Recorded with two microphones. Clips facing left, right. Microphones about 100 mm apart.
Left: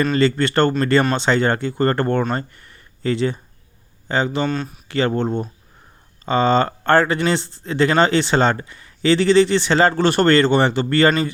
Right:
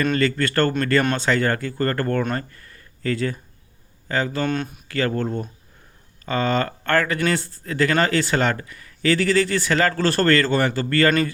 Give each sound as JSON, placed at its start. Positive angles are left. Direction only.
{"t": 0.0, "sound": "speech", "side_deg": 30}
{"t": 4.4, "sound": "speech", "side_deg": -5}
{"t": 4.9, "sound": "speech", "side_deg": 25}